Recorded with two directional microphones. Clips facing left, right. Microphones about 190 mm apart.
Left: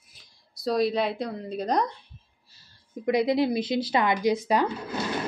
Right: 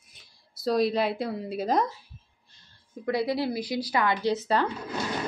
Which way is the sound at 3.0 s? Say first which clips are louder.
Left 4 dB; 20° left (ahead or behind).